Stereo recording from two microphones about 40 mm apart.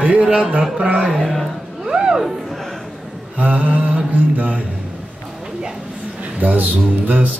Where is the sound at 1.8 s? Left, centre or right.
Right.